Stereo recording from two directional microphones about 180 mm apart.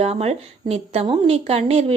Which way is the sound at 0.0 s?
35° right (ahead or behind).